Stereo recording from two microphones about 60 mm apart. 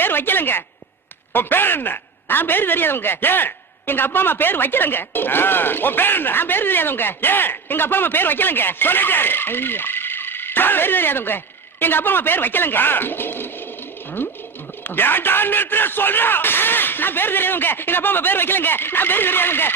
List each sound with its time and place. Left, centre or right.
0.0 s a woman's voice: left
14.8 s speech: left